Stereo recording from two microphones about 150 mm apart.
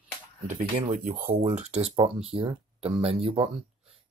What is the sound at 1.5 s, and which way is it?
Speech, 45° right (ahead or behind).